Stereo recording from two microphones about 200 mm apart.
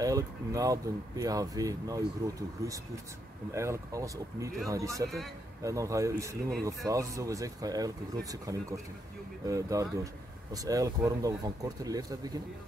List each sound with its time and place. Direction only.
0.0 s speech: 15° right (ahead or behind)